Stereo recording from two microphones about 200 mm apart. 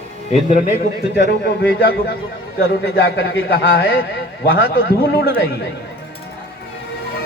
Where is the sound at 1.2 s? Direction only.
60° left (ahead or behind).